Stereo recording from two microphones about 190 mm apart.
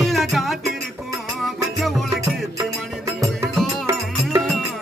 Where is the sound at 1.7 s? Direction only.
Centre (ahead or behind).